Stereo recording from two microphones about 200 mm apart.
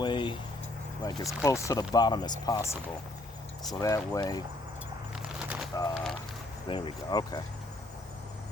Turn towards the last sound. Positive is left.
turn(degrees=20)  # may be behind; listen again after turning